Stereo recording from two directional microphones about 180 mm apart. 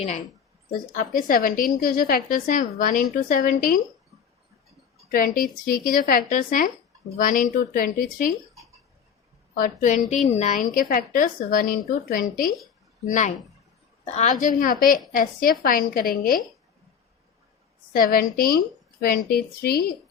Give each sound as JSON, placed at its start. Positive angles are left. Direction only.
{"t": 0.7, "sound": "a woman's voice", "side_deg": 50}
{"t": 5.1, "sound": "a woman's voice", "side_deg": 50}
{"t": 9.6, "sound": "a woman's voice", "side_deg": 50}
{"t": 17.9, "sound": "a woman's voice", "side_deg": 55}